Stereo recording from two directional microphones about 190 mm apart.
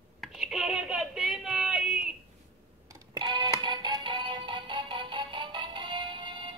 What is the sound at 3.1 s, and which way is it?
Music, 25° right (ahead or behind).